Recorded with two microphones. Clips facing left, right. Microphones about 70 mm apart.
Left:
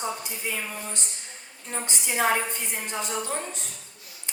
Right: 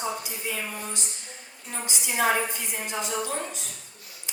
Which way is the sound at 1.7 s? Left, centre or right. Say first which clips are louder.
Left 1 dB; left.